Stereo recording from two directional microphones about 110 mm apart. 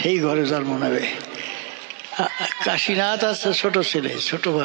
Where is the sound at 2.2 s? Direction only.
25° right (ahead or behind).